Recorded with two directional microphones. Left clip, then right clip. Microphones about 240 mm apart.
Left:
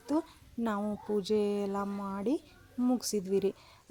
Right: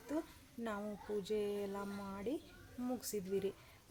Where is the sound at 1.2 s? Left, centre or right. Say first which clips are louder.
Left 9 dB; left.